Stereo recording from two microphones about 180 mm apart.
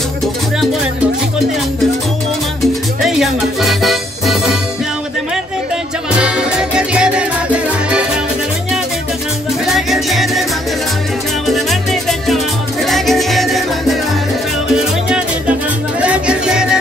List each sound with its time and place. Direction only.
3.0 s music: centre (ahead or behind)
6.1 s music: 5° right (ahead or behind)
9.7 s music: centre (ahead or behind)
11.4 s music: centre (ahead or behind)
15.0 s music: 5° right (ahead or behind)